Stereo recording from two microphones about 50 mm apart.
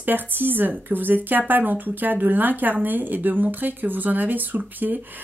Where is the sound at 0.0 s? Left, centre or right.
Right.